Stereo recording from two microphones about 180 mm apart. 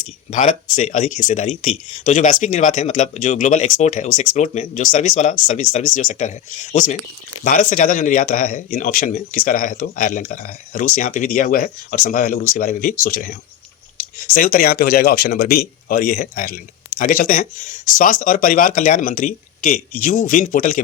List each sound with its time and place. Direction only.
0.0 s speech: 45° left (ahead or behind)
14.3 s speech: 55° left (ahead or behind)